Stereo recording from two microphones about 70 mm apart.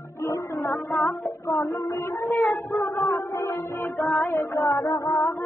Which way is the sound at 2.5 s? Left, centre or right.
Left.